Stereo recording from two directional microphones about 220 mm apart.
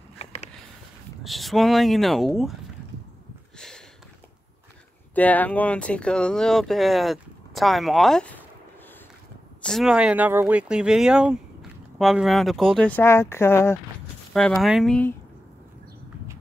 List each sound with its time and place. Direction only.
0.2 s a sound: 30° left (ahead or behind)
1.2 s speech: centre (ahead or behind)
3.5 s a sound: 5° left (ahead or behind)
5.1 s speech: 5° left (ahead or behind)
9.6 s speech: centre (ahead or behind)
14.6 s speech: centre (ahead or behind)